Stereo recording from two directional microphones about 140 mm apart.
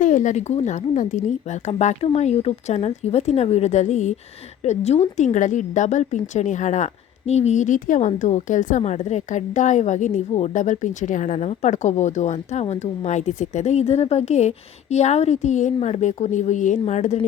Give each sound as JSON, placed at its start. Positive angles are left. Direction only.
{"t": 0.0, "sound": "a woman's voice", "side_deg": 65}